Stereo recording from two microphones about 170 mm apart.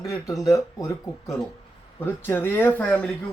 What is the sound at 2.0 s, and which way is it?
Speech, 15° left (ahead or behind).